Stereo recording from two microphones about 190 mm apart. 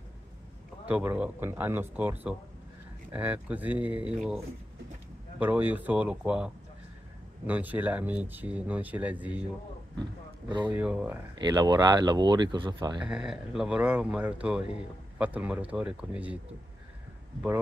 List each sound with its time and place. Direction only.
0.8 s speech: 5° right (ahead or behind)
5.4 s speech: 10° right (ahead or behind)
10.7 s speech: 10° right (ahead or behind)
11.3 s speech: 20° right (ahead or behind)
13.0 s speech: 5° right (ahead or behind)